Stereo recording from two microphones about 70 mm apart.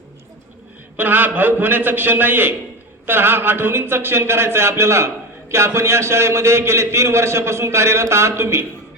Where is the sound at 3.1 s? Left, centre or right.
Right.